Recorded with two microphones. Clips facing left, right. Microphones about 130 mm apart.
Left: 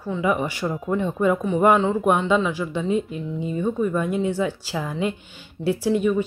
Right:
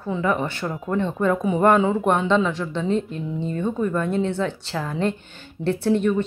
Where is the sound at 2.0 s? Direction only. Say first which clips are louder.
Even; 10° left (ahead or behind).